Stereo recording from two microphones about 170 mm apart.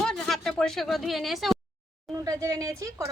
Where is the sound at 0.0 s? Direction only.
Centre (ahead or behind).